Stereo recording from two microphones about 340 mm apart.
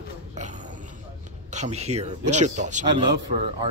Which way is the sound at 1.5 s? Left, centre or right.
Centre.